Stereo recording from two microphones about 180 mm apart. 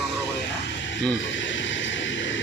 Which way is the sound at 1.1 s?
90° left.